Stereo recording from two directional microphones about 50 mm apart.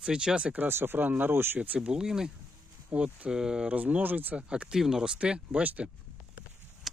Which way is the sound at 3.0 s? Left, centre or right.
Right.